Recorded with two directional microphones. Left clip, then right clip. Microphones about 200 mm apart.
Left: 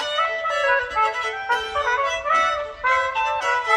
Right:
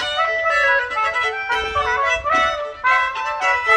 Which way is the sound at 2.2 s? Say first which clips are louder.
Right 2 dB; 15° left (ahead or behind).